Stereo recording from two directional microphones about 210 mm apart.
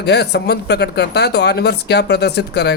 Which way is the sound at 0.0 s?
50° left (ahead or behind).